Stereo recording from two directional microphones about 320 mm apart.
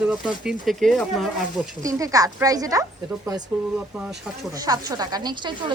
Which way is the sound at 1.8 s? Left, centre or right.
Centre.